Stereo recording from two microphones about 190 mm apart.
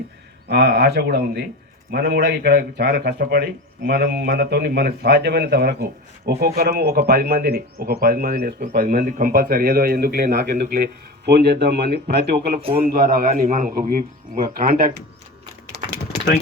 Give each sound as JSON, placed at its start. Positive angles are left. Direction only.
{"t": 0.4, "sound": "a man's voice", "side_deg": -60}